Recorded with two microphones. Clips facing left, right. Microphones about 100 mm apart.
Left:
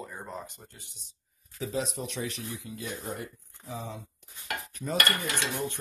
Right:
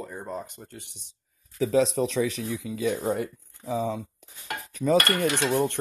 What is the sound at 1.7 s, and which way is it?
Speech, 90° right.